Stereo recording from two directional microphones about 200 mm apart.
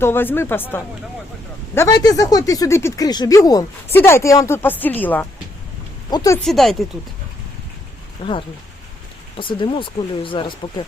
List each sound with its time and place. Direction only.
0.0 s speech: 10° left (ahead or behind)
6.4 s speech: centre (ahead or behind)
8.2 s speech: 25° left (ahead or behind)